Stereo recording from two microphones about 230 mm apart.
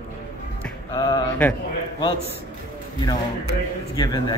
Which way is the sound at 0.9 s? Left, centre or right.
Centre.